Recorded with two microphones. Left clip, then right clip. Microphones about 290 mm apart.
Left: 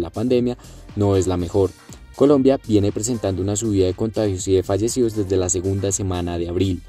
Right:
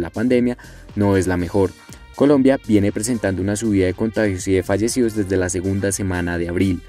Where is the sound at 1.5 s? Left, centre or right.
Right.